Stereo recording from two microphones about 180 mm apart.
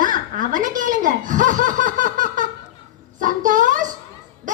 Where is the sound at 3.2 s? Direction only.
45° right (ahead or behind).